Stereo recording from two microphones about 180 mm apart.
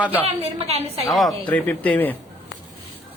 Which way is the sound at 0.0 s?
10° right (ahead or behind).